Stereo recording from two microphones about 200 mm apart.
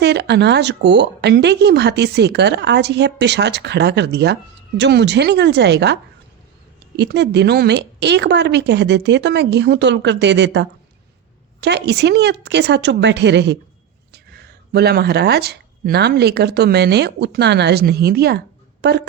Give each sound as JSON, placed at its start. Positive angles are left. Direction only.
{"t": 0.0, "sound": "speech", "side_deg": -55}